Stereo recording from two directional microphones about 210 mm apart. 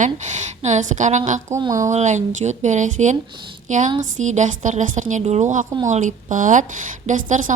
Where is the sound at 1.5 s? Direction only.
15° right (ahead or behind).